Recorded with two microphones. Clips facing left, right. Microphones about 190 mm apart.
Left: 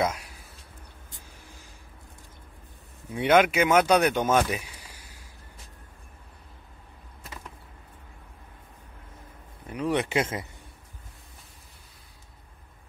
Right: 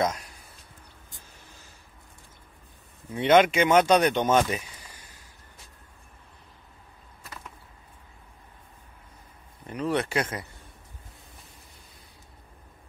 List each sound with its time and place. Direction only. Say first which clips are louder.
0.0 s speech: even; 10° left (ahead or behind)
3.1 s speech: right 1 dB; 10° left (ahead or behind)
4.5 s a sound: even; 10° left (ahead or behind)
9.7 s speech: even; 10° left (ahead or behind)